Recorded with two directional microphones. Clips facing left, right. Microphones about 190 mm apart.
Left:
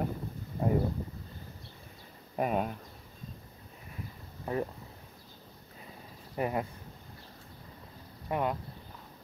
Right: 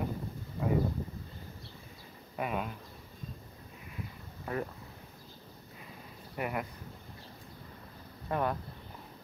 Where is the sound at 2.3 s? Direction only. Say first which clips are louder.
Left 5 dB; 40° left (ahead or behind).